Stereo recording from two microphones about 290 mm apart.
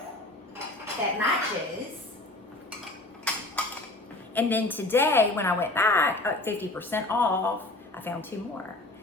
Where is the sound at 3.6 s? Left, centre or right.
Centre.